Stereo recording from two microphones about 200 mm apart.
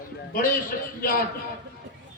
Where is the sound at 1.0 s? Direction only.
45° left (ahead or behind).